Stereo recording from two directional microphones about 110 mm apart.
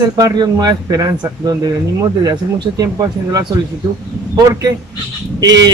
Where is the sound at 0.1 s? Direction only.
40° right (ahead or behind).